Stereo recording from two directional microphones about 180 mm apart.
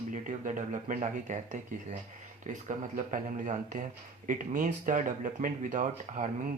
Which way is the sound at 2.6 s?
45° right (ahead or behind).